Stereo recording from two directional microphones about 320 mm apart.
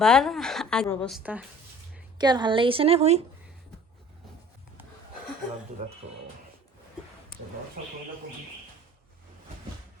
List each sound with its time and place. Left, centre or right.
0.0 s a woman's voice: centre
6.0 s speech: centre